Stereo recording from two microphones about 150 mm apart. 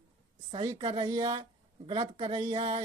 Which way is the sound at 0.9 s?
25° right (ahead or behind).